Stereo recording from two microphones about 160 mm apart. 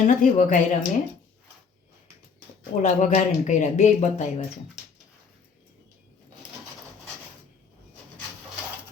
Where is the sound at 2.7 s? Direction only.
45° left (ahead or behind).